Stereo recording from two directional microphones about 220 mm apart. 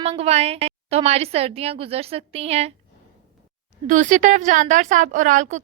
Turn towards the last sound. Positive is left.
turn(degrees=-35)  # may be behind; listen again after turning